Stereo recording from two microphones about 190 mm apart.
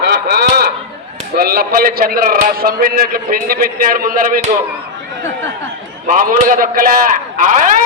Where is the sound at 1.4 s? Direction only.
55° right (ahead or behind).